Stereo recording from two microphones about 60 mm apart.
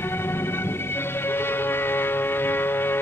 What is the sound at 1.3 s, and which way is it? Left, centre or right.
Music, left.